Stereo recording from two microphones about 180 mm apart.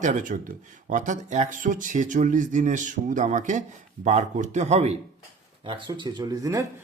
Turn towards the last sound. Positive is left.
turn(degrees=-20)  # may be behind; listen again after turning